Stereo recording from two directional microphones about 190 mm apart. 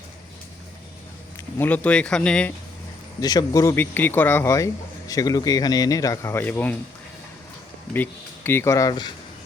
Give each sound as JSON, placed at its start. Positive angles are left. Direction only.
{"t": 1.5, "sound": "speech", "side_deg": 10}
{"t": 3.2, "sound": "speech", "side_deg": 20}
{"t": 8.4, "sound": "speech", "side_deg": 15}